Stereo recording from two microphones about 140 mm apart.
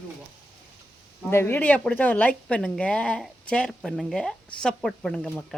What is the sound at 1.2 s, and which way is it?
Speech, 15° left (ahead or behind).